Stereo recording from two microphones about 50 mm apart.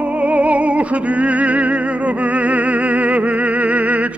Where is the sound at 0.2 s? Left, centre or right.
Right.